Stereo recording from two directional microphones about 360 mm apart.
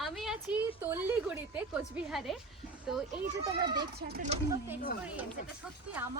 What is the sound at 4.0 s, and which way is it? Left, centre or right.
Speech, right.